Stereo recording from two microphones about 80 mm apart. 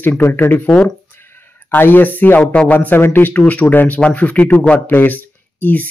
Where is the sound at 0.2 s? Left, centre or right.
Left.